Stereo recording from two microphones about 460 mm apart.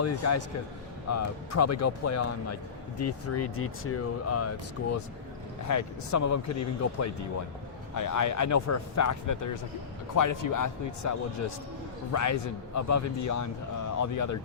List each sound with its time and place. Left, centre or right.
0.0 s speech: left